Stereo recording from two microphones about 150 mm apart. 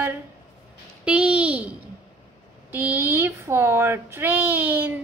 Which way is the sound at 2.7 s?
10° right (ahead or behind).